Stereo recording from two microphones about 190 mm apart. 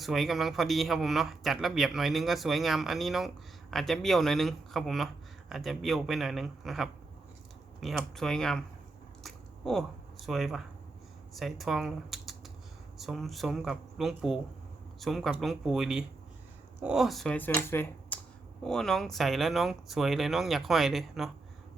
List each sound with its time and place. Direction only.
0.0 s a man's voice: centre (ahead or behind)
9.2 s biting: centre (ahead or behind)
10.2 s a man's voice: centre (ahead or behind)